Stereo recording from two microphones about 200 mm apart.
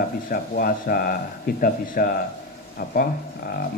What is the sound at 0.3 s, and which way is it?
Speech, 45° left (ahead or behind).